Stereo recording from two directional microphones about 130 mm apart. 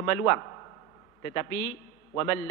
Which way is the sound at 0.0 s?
20° left (ahead or behind).